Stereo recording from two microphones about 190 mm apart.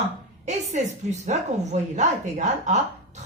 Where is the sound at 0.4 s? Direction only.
35° right (ahead or behind).